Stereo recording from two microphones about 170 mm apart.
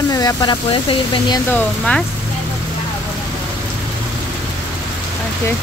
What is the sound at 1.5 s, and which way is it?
Speech, 5° left (ahead or behind).